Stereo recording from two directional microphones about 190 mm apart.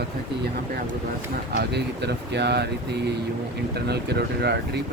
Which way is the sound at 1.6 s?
60° right (ahead or behind).